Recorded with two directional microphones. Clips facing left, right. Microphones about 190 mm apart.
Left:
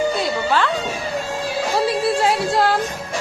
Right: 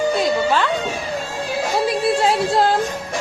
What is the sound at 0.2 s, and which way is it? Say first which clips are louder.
Music: right 2 dB; 15° right (ahead or behind).